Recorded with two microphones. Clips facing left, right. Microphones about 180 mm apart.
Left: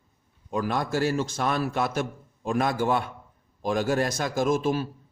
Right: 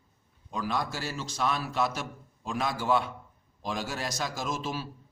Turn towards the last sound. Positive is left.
turn(degrees=55)  # may be behind; listen again after turning